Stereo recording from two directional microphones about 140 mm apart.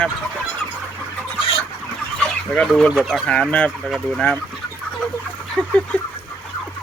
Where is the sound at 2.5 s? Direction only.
5° left (ahead or behind).